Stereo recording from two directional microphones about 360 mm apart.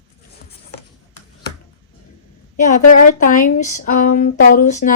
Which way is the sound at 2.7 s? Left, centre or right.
Left.